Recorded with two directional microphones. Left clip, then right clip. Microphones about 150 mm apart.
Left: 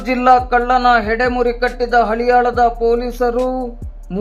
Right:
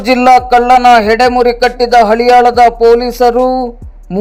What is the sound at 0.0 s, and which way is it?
A man's voice, 45° right (ahead or behind).